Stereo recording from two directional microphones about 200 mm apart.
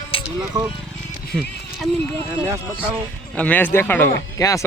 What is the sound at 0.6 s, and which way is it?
Speech, 20° right (ahead or behind).